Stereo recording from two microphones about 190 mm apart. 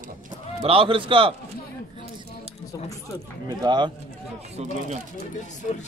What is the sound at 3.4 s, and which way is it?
Speech, 20° right (ahead or behind).